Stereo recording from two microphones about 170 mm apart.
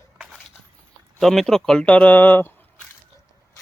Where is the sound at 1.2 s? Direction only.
Centre (ahead or behind).